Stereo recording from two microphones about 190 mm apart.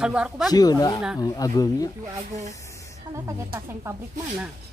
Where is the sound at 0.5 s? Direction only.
20° left (ahead or behind).